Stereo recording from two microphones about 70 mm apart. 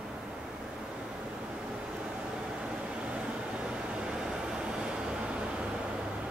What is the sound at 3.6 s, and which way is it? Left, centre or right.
Vehicle, centre.